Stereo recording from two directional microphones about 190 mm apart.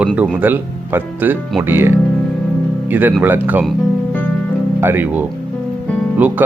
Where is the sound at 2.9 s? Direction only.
10° right (ahead or behind).